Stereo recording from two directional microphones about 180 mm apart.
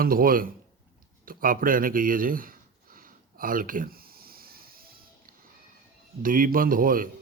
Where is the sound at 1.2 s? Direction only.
50° right (ahead or behind).